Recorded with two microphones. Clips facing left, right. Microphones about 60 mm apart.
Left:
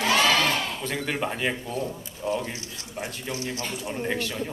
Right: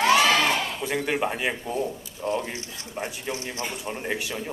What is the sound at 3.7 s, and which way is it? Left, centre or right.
Speech, centre.